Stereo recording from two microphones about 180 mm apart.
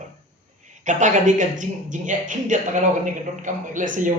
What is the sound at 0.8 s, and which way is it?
Speech, 45° right (ahead or behind).